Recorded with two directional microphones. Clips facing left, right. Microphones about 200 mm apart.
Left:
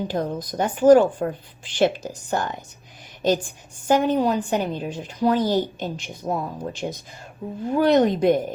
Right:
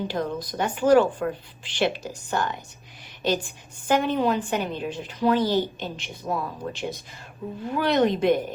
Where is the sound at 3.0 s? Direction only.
45° left (ahead or behind).